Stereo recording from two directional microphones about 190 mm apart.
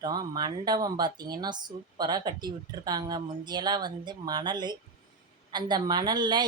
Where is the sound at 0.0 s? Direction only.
20° right (ahead or behind).